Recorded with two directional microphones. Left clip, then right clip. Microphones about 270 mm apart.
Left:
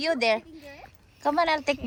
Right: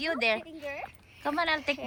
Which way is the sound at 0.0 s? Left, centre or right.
Centre.